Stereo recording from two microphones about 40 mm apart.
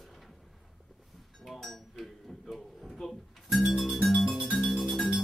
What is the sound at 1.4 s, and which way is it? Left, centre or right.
Dishes, centre.